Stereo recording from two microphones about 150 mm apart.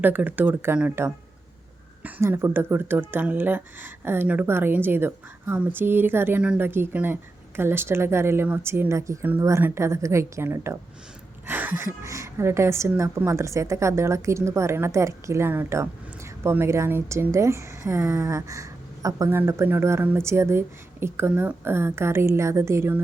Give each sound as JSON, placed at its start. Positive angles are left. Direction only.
{"t": 0.0, "sound": "a woman's voice", "side_deg": -10}